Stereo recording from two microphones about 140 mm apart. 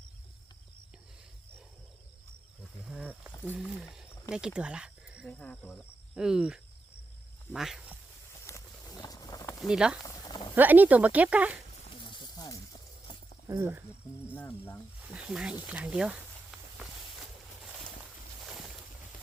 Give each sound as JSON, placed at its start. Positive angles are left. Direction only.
{"t": 3.6, "sound": "speech", "side_deg": 0}
{"t": 5.4, "sound": "speech", "side_deg": 10}
{"t": 6.1, "sound": "speech", "side_deg": -5}
{"t": 8.4, "sound": "a sound", "side_deg": 25}
{"t": 9.6, "sound": "speech", "side_deg": -5}
{"t": 10.2, "sound": "clip-clop", "side_deg": 30}
{"t": 10.5, "sound": "speech", "side_deg": -10}
{"t": 12.1, "sound": "snake", "side_deg": 30}
{"t": 13.6, "sound": "speech", "side_deg": -15}
{"t": 15.1, "sound": "speech", "side_deg": -5}
{"t": 18.4, "sound": "boat", "side_deg": 0}